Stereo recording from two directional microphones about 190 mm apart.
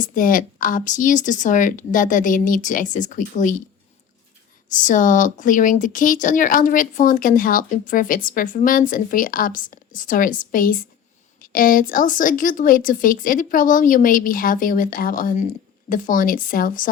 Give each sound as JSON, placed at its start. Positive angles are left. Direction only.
{"t": 0.0, "sound": "speech", "side_deg": 45}
{"t": 4.7, "sound": "speech", "side_deg": 40}